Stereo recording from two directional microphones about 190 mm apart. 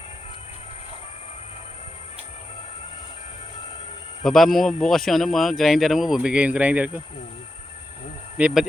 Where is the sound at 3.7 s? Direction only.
30° left (ahead or behind).